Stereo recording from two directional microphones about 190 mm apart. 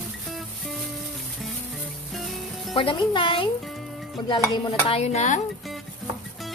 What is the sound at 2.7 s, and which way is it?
Speech, 25° left (ahead or behind).